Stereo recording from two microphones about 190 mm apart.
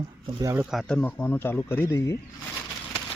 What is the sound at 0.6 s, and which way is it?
Speech, centre (ahead or behind).